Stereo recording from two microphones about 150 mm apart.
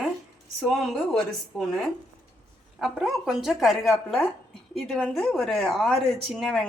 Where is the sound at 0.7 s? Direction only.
Centre (ahead or behind).